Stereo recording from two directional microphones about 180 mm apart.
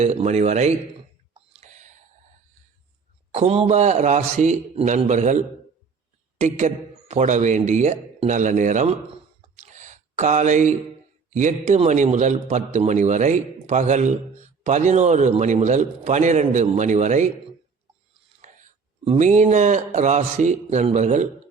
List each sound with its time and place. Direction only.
0.0 s a man's voice: 35° right (ahead or behind)
1.3 s a sound: 40° right (ahead or behind)
3.3 s a man's voice: 35° right (ahead or behind)
6.4 s a man's voice: 40° right (ahead or behind)
9.6 s a sound: 40° right (ahead or behind)
11.3 s a man's voice: 40° right (ahead or behind)
18.4 s speech: 40° right (ahead or behind)